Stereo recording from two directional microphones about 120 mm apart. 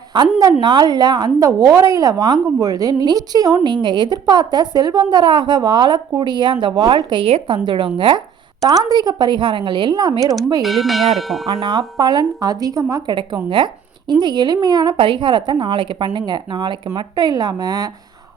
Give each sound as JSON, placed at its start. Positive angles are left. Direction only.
{"t": 0.1, "sound": "a woman's voice", "side_deg": -40}
{"t": 8.6, "sound": "a woman's voice", "side_deg": -30}
{"t": 10.6, "sound": "bell", "side_deg": 0}
{"t": 11.4, "sound": "a woman's voice", "side_deg": -40}
{"t": 13.1, "sound": "a woman's voice", "side_deg": -45}